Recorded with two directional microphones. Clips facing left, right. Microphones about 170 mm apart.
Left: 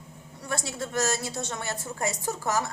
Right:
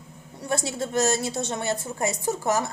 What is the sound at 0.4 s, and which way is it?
A woman's voice, 25° right (ahead or behind).